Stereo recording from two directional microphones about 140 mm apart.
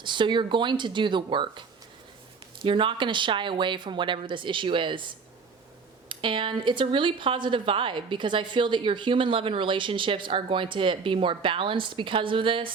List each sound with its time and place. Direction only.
0.0 s speech: 35° right (ahead or behind)
2.6 s speech: 35° right (ahead or behind)